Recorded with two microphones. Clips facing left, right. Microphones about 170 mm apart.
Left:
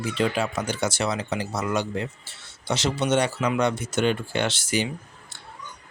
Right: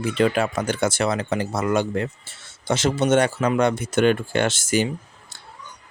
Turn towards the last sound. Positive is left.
turn(degrees=-45)  # may be behind; listen again after turning